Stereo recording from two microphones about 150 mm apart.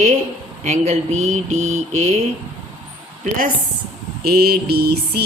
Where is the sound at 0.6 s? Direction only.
50° right (ahead or behind).